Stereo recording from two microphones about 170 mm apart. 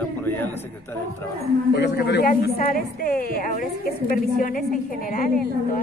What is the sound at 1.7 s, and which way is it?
A woman's voice, 90° left.